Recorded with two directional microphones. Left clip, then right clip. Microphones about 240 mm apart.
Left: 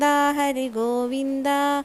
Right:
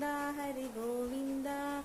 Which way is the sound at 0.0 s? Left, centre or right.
Left.